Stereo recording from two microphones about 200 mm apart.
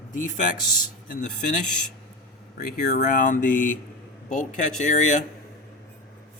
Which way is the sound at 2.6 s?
45° left (ahead or behind).